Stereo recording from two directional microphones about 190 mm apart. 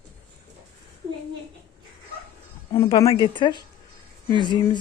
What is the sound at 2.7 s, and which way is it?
Speech, 20° left (ahead or behind).